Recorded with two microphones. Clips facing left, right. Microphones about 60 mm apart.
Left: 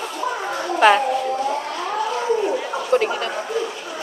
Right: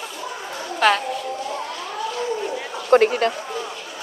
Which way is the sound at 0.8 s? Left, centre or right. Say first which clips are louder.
Left 4 dB; centre.